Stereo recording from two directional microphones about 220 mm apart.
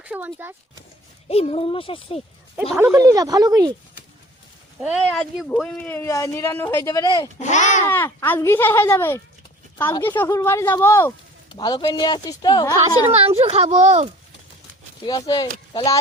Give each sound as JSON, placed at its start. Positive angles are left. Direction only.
{"t": 0.0, "sound": "speech", "side_deg": -5}
{"t": 1.3, "sound": "speech", "side_deg": 25}
{"t": 2.7, "sound": "speech", "side_deg": -15}
{"t": 5.1, "sound": "speech", "side_deg": 0}
{"t": 7.3, "sound": "a child's voice", "side_deg": 35}
{"t": 7.9, "sound": "speech", "side_deg": 10}
{"t": 13.1, "sound": "a child's voice", "side_deg": -25}
{"t": 15.0, "sound": "speech", "side_deg": 20}